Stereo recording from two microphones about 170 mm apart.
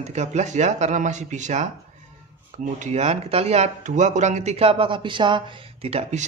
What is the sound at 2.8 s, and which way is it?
Speech, 40° right (ahead or behind).